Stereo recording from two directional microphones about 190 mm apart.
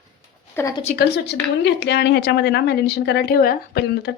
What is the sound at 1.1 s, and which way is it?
A woman's voice, 65° left (ahead or behind).